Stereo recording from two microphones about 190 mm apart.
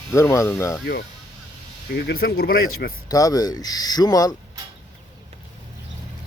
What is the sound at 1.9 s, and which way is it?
Speech, 55° left (ahead or behind).